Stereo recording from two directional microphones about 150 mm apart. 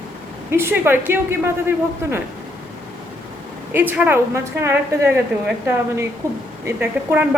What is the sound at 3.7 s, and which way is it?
A man's voice, 10° right (ahead or behind).